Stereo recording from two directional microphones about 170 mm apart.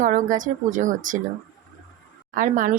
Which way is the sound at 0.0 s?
50° right (ahead or behind).